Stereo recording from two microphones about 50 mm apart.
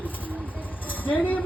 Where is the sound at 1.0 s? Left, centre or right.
Left.